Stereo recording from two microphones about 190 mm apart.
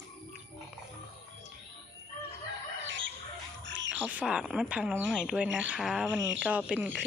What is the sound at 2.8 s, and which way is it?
Bird, 80° right.